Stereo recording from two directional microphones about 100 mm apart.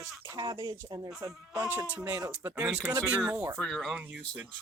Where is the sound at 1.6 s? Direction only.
15° right (ahead or behind).